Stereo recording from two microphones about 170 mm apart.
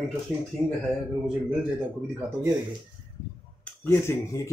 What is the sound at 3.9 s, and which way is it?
Speech, 15° left (ahead or behind).